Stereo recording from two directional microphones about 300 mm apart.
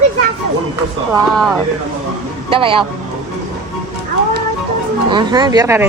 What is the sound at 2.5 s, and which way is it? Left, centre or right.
Speech, centre.